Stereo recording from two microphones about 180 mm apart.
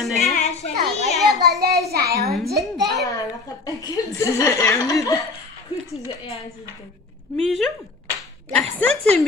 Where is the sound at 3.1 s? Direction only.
20° left (ahead or behind).